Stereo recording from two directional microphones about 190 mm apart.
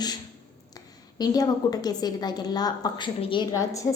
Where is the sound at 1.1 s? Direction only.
20° left (ahead or behind).